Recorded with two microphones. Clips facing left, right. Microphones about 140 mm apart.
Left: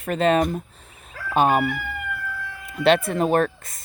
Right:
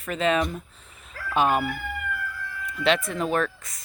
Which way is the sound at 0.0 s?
50° left (ahead or behind).